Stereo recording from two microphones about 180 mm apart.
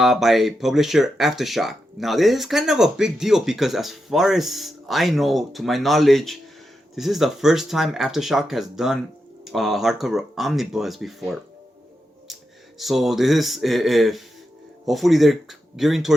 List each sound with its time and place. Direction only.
0.0 s speech: centre (ahead or behind)
12.8 s speech: centre (ahead or behind)